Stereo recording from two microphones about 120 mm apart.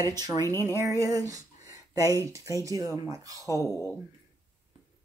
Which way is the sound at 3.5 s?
25° left (ahead or behind).